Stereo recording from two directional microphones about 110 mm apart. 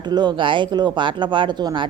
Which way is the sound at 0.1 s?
40° right (ahead or behind).